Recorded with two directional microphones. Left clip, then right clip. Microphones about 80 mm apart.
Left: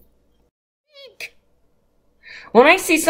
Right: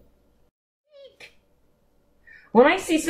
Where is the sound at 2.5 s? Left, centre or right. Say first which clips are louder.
Left 5 dB; centre.